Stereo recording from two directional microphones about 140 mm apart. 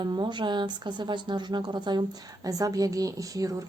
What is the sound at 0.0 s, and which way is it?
A woman's voice, 30° right (ahead or behind).